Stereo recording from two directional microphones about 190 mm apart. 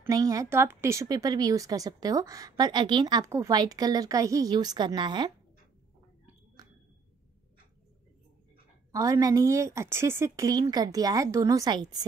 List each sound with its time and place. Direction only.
0.0 s speech: 20° right (ahead or behind)
8.9 s a woman's voice: 20° right (ahead or behind)